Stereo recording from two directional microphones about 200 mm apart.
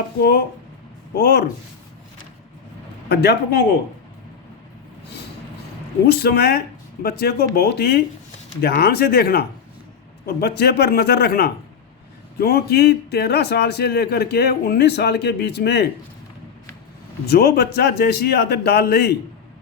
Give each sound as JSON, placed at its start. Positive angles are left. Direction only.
{"t": 1.1, "sound": "a man's voice", "side_deg": 55}
{"t": 3.1, "sound": "a man's voice", "side_deg": 55}
{"t": 6.1, "sound": "a man's voice", "side_deg": 50}
{"t": 17.2, "sound": "a man's voice", "side_deg": 55}